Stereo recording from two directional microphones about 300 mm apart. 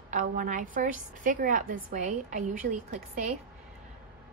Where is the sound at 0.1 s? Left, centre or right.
Right.